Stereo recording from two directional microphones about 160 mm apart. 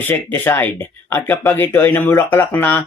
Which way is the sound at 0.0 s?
15° left (ahead or behind).